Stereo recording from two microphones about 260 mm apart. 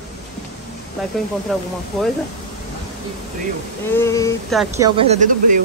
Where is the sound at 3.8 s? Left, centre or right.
Centre.